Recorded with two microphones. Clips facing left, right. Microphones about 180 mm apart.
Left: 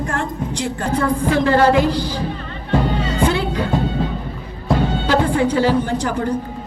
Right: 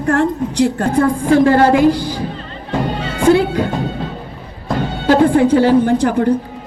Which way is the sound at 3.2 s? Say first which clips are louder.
Right 9 dB; 50° right (ahead or behind).